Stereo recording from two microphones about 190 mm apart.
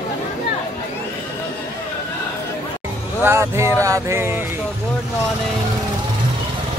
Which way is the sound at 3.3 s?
15° right (ahead or behind).